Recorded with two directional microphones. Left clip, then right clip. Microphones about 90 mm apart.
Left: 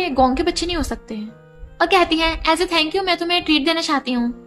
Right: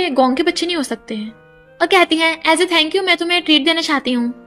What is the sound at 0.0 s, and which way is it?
A woman's voice, 40° right (ahead or behind).